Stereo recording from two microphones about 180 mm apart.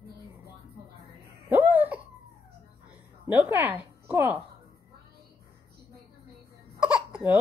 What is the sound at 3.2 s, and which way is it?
Speech, 10° right (ahead or behind).